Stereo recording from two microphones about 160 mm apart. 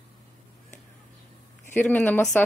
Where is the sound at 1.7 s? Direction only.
10° left (ahead or behind).